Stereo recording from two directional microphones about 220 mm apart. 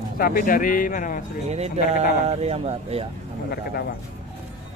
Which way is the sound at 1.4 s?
30° right (ahead or behind).